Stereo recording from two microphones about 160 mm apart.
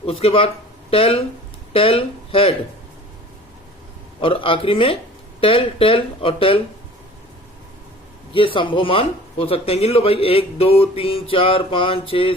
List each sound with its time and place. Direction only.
0.0 s speech: 40° left (ahead or behind)
4.2 s speech: 35° left (ahead or behind)
8.3 s speech: 35° left (ahead or behind)